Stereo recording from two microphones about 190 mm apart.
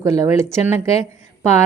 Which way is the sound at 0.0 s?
15° right (ahead or behind).